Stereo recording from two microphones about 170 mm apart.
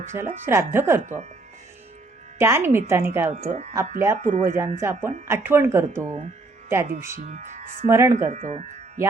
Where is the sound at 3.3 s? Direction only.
45° right (ahead or behind).